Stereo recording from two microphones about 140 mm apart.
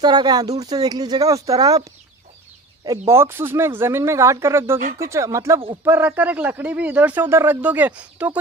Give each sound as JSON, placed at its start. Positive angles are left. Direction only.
{"t": 0.0, "sound": "speech", "side_deg": -30}
{"t": 2.8, "sound": "a man's voice", "side_deg": -25}